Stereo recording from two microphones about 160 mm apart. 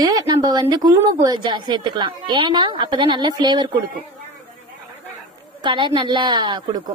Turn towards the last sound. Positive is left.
turn(degrees=-25)  # may be behind; listen again after turning